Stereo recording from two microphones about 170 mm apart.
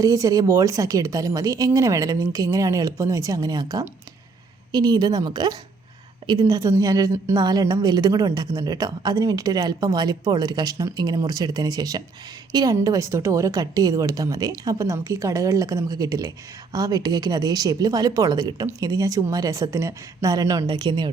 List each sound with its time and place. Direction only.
0.0 s speech: 20° right (ahead or behind)